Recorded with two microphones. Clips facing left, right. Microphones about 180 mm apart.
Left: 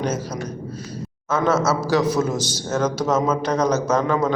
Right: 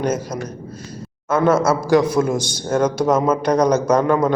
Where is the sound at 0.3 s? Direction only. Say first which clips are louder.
Right 1 dB; 10° right (ahead or behind).